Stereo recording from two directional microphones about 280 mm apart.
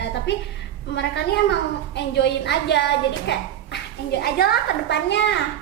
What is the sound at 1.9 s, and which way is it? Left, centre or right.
Speech, left.